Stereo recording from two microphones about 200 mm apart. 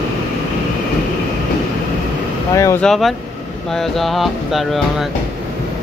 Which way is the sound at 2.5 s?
15° left (ahead or behind).